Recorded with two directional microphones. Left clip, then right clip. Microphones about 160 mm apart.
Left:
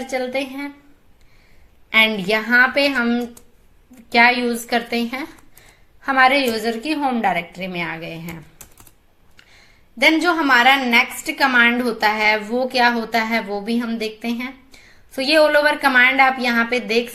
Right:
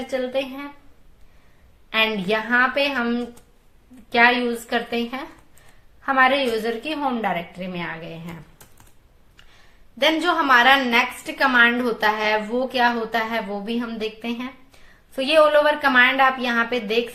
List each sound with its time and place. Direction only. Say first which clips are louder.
0.1 s a woman's voice: left 1 dB; 20° left (ahead or behind)
1.9 s a woman's voice: left 5 dB; 25° left (ahead or behind)
10.0 s a woman's voice: left 3 dB; 15° left (ahead or behind)